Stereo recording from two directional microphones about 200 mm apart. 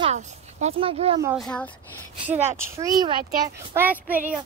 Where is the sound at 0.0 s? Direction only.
35° right (ahead or behind).